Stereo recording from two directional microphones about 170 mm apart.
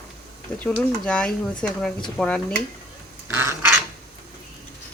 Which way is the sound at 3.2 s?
15° right (ahead or behind).